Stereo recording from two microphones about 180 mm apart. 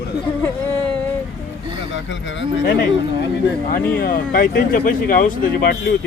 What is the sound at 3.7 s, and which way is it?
Speech, 50° left (ahead or behind).